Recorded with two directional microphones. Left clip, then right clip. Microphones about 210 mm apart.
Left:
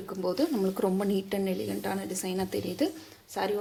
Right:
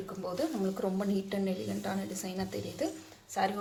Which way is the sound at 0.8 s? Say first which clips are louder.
Left 5 dB; 35° left (ahead or behind).